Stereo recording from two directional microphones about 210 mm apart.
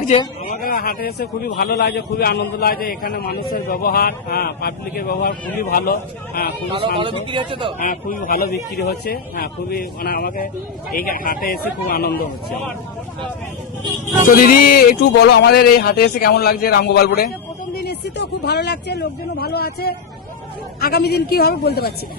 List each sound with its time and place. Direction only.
0.4 s speech: 45° left (ahead or behind)
6.7 s speech: 25° right (ahead or behind)
7.8 s speech: 40° left (ahead or behind)
14.4 s speech: 45° left (ahead or behind)